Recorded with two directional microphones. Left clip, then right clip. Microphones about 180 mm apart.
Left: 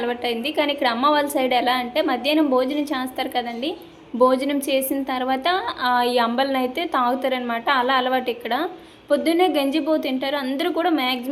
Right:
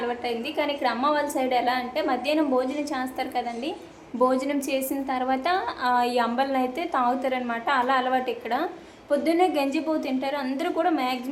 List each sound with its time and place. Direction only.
0.0 s a woman's voice: 20° left (ahead or behind)